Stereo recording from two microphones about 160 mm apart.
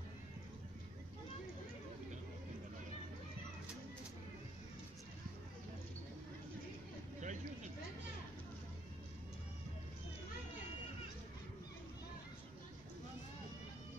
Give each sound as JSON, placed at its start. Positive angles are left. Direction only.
{"t": 7.2, "sound": "vehicle", "side_deg": -50}